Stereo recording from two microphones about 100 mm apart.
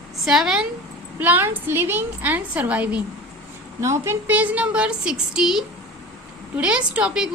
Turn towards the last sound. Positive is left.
turn(degrees=-10)  # may be behind; listen again after turning